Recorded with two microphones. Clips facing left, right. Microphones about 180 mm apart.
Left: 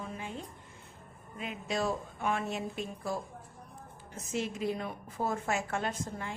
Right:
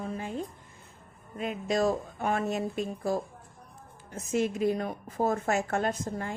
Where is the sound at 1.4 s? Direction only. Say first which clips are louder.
Right 6 dB; 40° right (ahead or behind).